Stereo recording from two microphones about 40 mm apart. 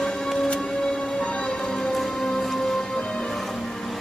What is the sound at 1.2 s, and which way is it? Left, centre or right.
Music, left.